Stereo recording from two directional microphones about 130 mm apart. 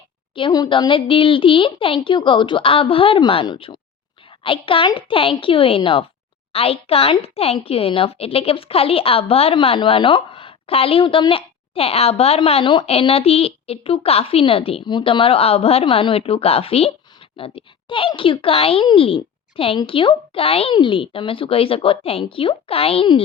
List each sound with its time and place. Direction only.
0.3 s a woman's voice: 35° left (ahead or behind)